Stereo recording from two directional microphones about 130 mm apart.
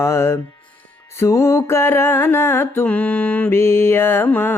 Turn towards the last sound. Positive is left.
turn(degrees=15)  # may be behind; listen again after turning